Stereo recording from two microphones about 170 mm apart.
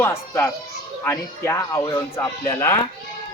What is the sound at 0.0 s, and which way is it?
Speech, 15° left (ahead or behind).